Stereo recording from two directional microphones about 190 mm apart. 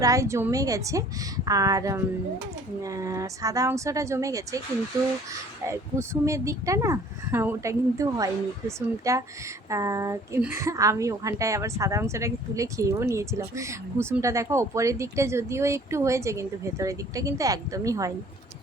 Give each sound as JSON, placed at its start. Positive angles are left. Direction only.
{"t": 0.0, "sound": "speech", "side_deg": -15}
{"t": 5.6, "sound": "speech", "side_deg": -15}